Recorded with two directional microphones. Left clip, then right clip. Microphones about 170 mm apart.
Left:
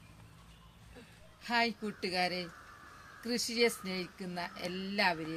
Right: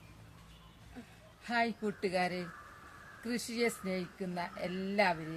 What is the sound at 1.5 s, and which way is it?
Speech, 15° right (ahead or behind).